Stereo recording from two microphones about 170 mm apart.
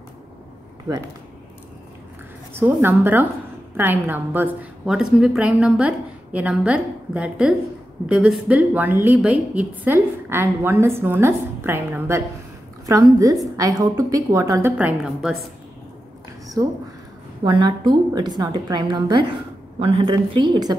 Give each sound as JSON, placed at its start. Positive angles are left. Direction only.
{"t": 2.5, "sound": "a woman's voice", "side_deg": -10}
{"t": 14.8, "sound": "a woman's voice", "side_deg": -5}
{"t": 16.6, "sound": "a woman's voice", "side_deg": -20}